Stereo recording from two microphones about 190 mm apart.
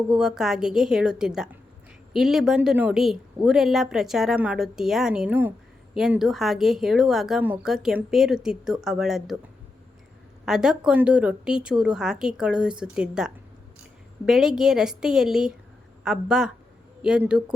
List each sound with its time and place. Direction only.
0.1 s a woman's voice: 5° right (ahead or behind)
10.4 s a woman's voice: 5° right (ahead or behind)